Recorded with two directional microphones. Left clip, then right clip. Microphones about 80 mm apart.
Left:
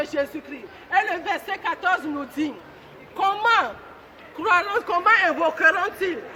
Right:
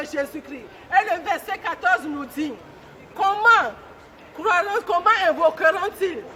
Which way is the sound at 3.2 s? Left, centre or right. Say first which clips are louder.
Right 3 dB; right.